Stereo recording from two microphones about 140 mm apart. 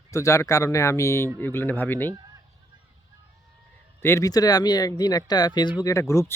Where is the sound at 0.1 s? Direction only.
20° left (ahead or behind).